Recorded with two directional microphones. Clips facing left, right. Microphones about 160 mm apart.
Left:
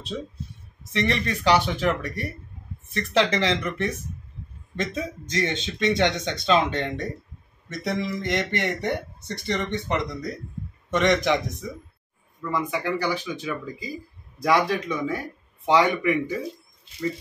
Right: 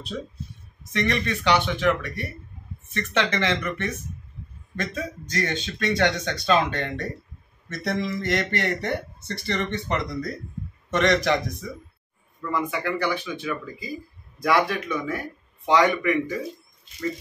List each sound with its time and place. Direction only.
0.1 s speech: 10° left (ahead or behind)
0.9 s speech: 30° left (ahead or behind)
4.7 s speech: 20° left (ahead or behind)